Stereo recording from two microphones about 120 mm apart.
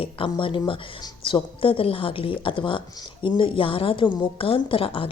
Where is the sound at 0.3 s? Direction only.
45° left (ahead or behind).